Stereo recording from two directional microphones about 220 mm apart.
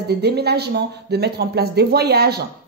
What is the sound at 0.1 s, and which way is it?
A woman's voice, 45° right (ahead or behind).